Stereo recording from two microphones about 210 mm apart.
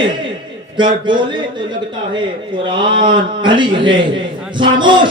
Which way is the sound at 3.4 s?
20° right (ahead or behind).